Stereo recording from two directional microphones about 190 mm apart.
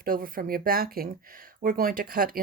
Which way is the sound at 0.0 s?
50° right (ahead or behind).